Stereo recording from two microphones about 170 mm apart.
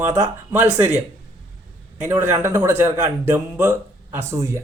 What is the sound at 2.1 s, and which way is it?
Speech, 15° right (ahead or behind).